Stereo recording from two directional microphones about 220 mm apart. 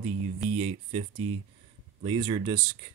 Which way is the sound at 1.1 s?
80° right.